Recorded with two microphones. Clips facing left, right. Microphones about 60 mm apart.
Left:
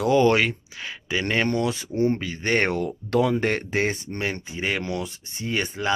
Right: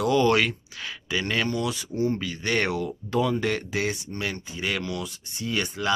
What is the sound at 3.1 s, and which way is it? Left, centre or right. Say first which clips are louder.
Speech: left 3 dB; left.